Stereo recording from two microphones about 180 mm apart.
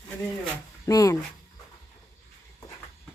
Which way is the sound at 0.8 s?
20° left (ahead or behind).